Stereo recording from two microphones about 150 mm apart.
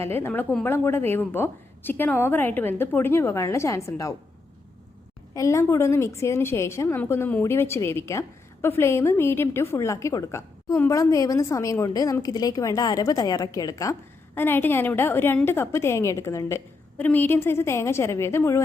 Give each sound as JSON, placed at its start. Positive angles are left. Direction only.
{"t": 0.0, "sound": "a woman's voice", "side_deg": 15}
{"t": 5.3, "sound": "a woman's voice", "side_deg": 20}